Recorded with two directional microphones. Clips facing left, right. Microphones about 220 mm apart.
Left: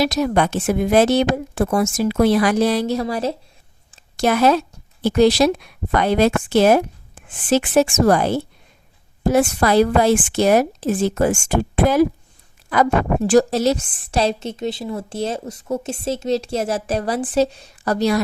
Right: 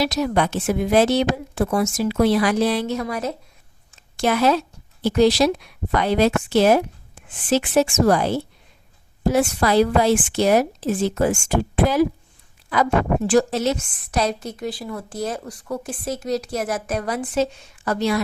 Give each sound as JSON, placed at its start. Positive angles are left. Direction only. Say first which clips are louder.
{"t": 0.0, "sound": "a woman's voice", "louder": "left 2 dB", "side_deg": 50}
{"t": 3.9, "sound": "a sound", "louder": "left 2 dB", "side_deg": 45}
{"t": 5.0, "sound": "a woman's voice", "louder": "left 2 dB", "side_deg": 50}